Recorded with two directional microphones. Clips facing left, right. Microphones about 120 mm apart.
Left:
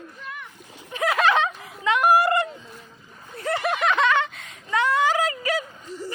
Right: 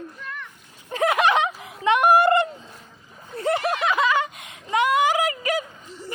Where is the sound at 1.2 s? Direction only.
15° right (ahead or behind).